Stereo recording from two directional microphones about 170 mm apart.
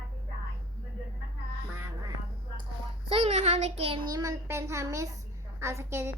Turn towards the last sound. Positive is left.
turn(degrees=-15)  # may be behind; listen again after turning